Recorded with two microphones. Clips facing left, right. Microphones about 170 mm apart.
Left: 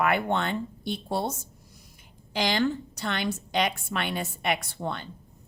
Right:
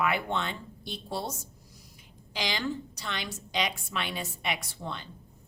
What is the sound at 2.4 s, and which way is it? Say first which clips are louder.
A woman's voice: left 7 dB; 50° left (ahead or behind).